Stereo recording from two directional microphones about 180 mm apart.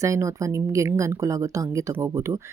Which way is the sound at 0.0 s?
15° right (ahead or behind).